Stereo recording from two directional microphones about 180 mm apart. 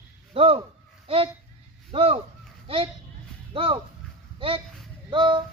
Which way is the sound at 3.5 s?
30° right (ahead or behind).